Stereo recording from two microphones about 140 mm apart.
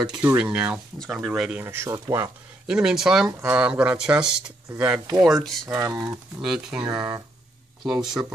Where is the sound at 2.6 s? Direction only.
5° right (ahead or behind).